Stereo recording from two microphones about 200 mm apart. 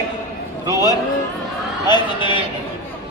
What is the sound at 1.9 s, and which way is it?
Speech, 25° left (ahead or behind).